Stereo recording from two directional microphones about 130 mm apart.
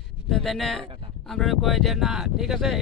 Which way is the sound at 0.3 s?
Centre (ahead or behind).